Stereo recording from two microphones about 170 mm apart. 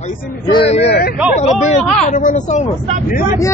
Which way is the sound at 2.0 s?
50° left (ahead or behind).